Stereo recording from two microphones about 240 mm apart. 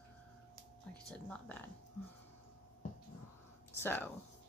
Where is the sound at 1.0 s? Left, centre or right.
Centre.